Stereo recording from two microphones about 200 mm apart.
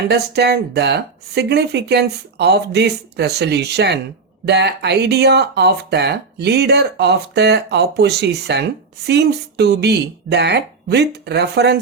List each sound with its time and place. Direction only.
0.1 s speech: 55° right (ahead or behind)